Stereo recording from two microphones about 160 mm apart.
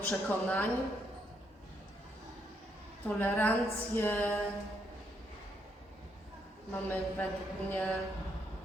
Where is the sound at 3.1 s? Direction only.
10° left (ahead or behind).